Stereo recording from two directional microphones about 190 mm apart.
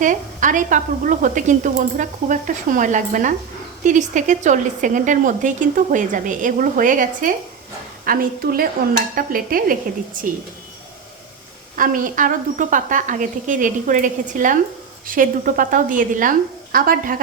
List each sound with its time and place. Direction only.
0.0 s a woman's voice: 45° right (ahead or behind)
11.8 s a woman's voice: 45° right (ahead or behind)